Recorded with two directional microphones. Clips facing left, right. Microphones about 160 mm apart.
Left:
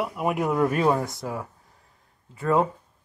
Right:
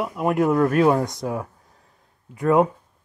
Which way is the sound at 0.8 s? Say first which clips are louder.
Right 4 dB; 15° right (ahead or behind).